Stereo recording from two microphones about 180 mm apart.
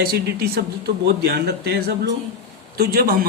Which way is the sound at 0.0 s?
60° right (ahead or behind).